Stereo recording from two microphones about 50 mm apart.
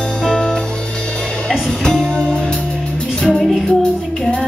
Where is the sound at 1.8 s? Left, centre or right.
Centre.